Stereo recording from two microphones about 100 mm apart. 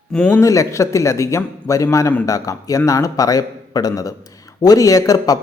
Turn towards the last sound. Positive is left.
turn(degrees=35)  # may be behind; listen again after turning